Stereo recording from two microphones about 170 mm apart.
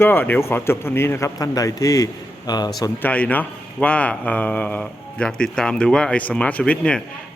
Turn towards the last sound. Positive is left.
turn(degrees=5)  # may be behind; listen again after turning